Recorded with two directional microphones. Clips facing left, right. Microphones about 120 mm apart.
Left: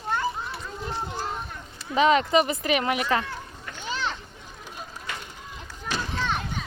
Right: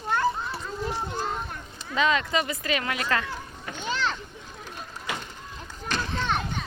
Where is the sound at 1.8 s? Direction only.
25° left (ahead or behind).